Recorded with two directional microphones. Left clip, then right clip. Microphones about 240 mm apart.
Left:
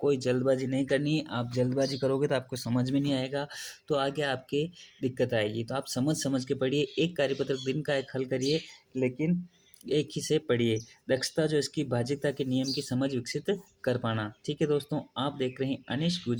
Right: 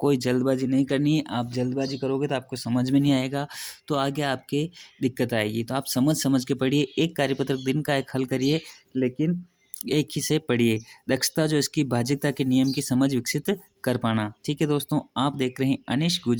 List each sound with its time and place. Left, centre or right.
0.0 s speech: right
1.5 s speech: centre; by 16.4 s right